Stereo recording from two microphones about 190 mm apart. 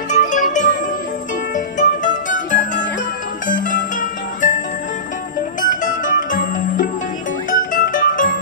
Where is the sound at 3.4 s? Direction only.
45° left (ahead or behind).